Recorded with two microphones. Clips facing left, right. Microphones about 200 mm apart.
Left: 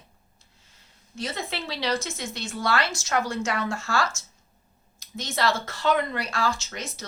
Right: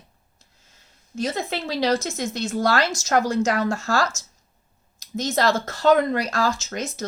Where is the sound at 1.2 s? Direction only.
45° right (ahead or behind).